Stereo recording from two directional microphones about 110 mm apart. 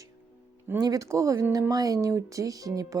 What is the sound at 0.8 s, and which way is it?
Speech, 30° right (ahead or behind).